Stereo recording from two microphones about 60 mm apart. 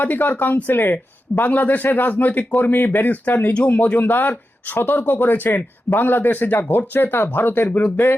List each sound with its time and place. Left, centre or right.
0.0 s speech: left